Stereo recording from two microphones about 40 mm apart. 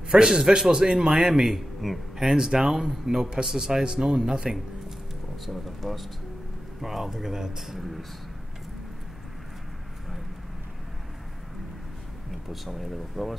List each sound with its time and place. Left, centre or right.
0.1 s a man's voice: centre
5.4 s a man's voice: centre
12.3 s speech: centre